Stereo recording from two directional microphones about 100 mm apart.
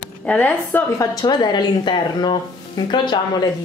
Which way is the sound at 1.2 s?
45° left (ahead or behind).